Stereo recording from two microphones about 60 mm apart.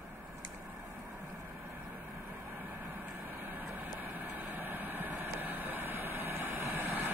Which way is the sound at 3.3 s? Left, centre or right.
Right.